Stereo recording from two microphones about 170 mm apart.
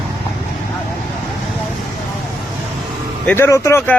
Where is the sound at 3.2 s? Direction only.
15° left (ahead or behind).